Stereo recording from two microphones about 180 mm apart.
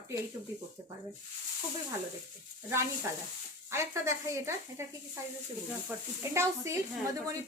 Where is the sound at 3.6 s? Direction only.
15° right (ahead or behind).